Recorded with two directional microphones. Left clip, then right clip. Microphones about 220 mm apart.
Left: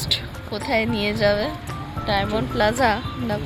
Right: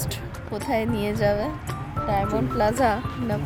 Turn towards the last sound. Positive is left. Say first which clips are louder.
# left 2 dB
turn(degrees=-5)  # may be behind; listen again after turning